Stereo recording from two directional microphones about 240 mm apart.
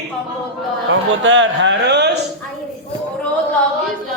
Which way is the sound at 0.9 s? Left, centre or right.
Right.